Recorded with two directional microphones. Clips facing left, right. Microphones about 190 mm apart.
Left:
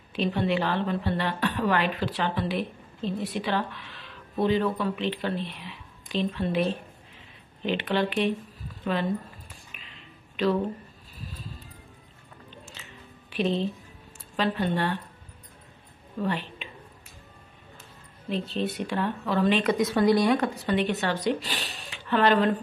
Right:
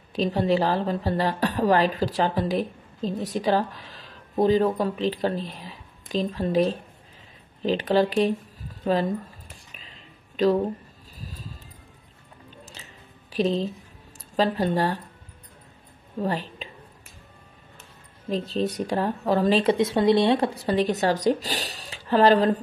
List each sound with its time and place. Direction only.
0.1 s a woman's voice: 40° right (ahead or behind)
9.7 s a sound: 40° right (ahead or behind)
11.1 s music: 40° right (ahead or behind)
12.4 s chewing: 40° right (ahead or behind)
14.1 s speech: 40° right (ahead or behind)
16.2 s speech: 40° right (ahead or behind)
18.3 s a woman's voice: 40° right (ahead or behind)